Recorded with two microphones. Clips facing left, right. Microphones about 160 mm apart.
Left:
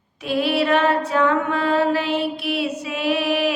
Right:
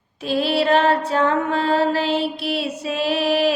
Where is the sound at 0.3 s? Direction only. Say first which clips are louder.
Right 1 dB; 30° right (ahead or behind).